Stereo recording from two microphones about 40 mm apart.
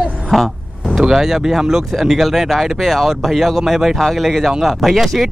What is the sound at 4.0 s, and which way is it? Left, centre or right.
Speech, centre.